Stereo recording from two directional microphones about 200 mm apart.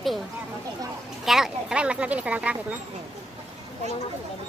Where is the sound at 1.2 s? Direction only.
Centre (ahead or behind).